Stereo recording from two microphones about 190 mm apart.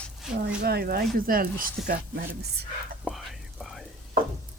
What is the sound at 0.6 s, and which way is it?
Speech, 55° right (ahead or behind).